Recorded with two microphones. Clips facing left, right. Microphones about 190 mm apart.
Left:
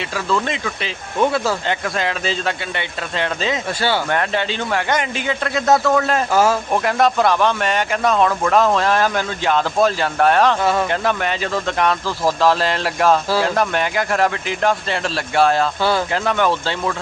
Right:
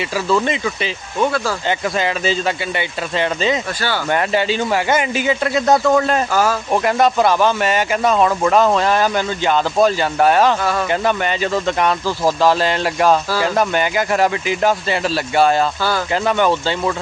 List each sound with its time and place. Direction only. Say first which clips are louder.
0.3 s speech: right 3 dB; centre (ahead or behind)
3.8 s speech: left 2 dB; 25° left (ahead or behind)
4.1 s speech: right 3 dB; 5° right (ahead or behind)
6.3 s speech: left 4 dB; 25° left (ahead or behind)
6.8 s speech: right 2 dB; centre (ahead or behind)